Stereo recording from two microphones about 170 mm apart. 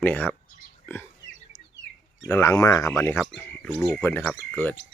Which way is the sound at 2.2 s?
15° left (ahead or behind).